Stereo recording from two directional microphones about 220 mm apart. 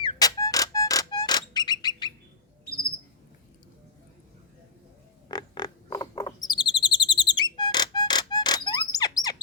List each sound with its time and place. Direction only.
0.0 s music: 15° left (ahead or behind)
5.3 s chirp: 20° left (ahead or behind)